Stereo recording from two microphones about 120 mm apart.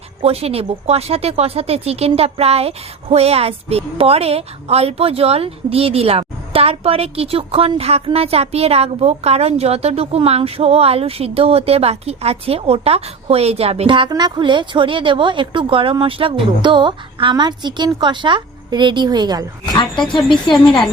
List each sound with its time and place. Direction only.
0.2 s speech: 55° right (ahead or behind)
13.8 s a woman's voice: 40° right (ahead or behind)
19.7 s speech: 40° left (ahead or behind)